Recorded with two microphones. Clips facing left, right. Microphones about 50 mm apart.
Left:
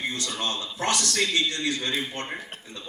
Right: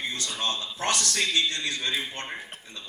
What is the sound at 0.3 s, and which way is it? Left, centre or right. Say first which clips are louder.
A man's voice: even; left.